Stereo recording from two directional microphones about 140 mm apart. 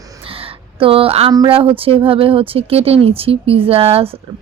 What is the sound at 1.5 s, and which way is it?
Speech, 40° right (ahead or behind).